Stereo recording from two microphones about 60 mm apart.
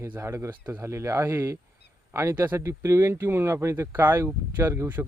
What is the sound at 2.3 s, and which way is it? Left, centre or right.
Speech, right.